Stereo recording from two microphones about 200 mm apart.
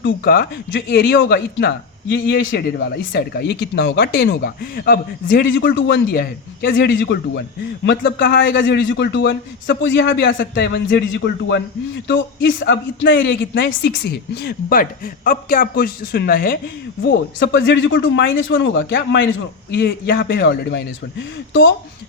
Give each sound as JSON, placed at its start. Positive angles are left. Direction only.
{"t": 0.0, "sound": "a man's voice", "side_deg": 55}
{"t": 5.5, "sound": "a man's voice", "side_deg": 70}